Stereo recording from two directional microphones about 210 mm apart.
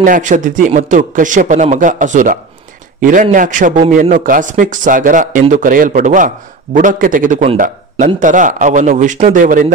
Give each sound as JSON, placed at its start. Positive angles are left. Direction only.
{"t": 0.0, "sound": "speech", "side_deg": -40}